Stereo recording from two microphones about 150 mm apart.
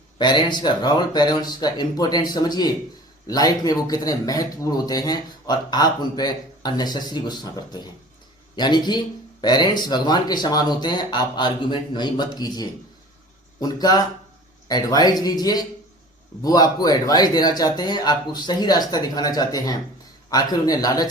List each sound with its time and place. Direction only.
0.2 s a man's voice: 30° left (ahead or behind)